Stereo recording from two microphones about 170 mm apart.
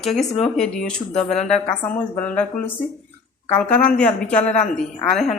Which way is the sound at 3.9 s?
5° left (ahead or behind).